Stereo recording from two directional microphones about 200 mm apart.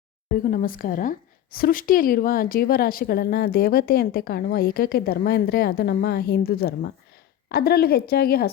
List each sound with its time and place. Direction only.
0.3 s a woman's voice: 45° left (ahead or behind)